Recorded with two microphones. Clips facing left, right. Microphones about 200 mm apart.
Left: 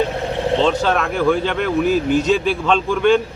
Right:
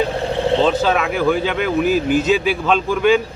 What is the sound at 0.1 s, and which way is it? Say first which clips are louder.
Vehicle: right 2 dB; 30° right (ahead or behind).